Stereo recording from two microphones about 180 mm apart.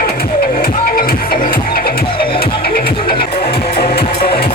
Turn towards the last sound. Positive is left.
turn(degrees=30)  # may be behind; listen again after turning